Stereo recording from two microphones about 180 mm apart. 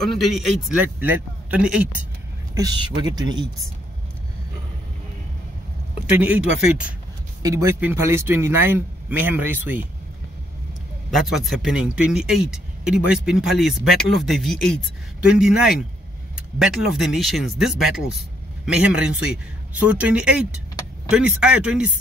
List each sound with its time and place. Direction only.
0.0 s speech: centre (ahead or behind)
2.5 s speech: 20° right (ahead or behind)
6.2 s speech: 5° right (ahead or behind)
11.1 s speech: centre (ahead or behind)